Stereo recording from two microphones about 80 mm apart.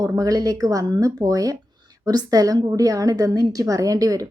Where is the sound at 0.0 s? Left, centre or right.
Right.